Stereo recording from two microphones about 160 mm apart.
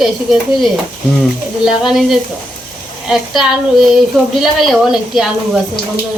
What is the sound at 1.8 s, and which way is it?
Speech, centre (ahead or behind).